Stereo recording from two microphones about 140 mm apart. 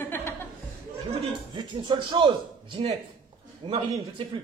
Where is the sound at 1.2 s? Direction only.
35° right (ahead or behind).